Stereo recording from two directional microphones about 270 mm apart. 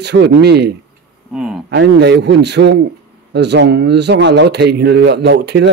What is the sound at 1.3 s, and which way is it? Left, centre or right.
Speech, centre.